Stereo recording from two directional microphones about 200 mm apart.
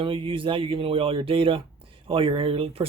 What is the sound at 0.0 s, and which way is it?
A woman's voice, 25° right (ahead or behind).